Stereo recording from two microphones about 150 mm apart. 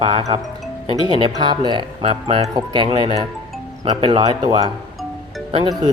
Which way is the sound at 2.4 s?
30° right (ahead or behind).